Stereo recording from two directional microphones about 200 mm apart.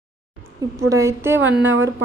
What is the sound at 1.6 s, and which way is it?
Speech, 70° right (ahead or behind).